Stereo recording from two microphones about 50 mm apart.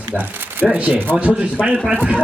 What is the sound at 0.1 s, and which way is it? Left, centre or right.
Speech, right.